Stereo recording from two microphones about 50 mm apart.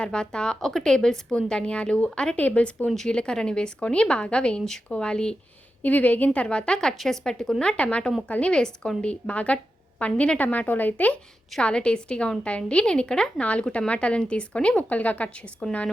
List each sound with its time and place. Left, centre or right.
0.0 s a woman's voice: centre
5.8 s a woman's voice: left; by 7.5 s centre
7.6 s a woman's voice: left